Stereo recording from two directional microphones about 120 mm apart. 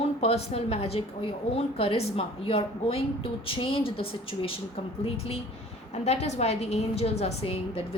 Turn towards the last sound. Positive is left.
turn(degrees=55)  # may be behind; listen again after turning